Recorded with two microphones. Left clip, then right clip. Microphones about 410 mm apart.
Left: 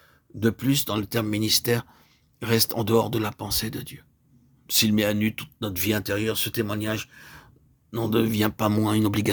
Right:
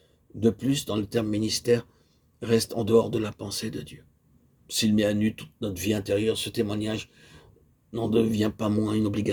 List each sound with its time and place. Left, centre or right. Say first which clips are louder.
0.3 s speech: left 1 dB; left